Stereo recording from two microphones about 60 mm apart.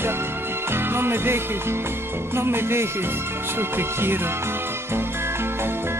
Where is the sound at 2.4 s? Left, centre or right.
Right.